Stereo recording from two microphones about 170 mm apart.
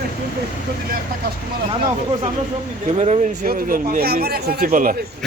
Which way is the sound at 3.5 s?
55° right (ahead or behind).